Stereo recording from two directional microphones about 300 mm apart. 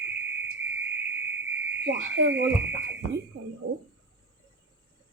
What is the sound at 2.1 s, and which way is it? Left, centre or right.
Speech, right.